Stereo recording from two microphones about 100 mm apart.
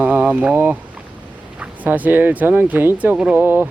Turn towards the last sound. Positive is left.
turn(degrees=-20)  # may be behind; listen again after turning